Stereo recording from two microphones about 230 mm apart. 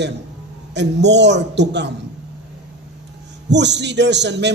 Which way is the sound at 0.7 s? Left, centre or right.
Right.